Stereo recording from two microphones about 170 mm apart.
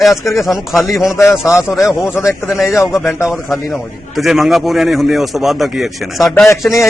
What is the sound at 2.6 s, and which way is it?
Speech, 15° left (ahead or behind).